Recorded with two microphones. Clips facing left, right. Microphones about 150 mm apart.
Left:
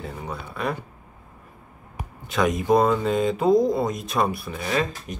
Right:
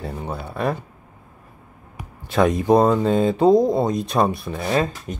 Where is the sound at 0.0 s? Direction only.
40° right (ahead or behind).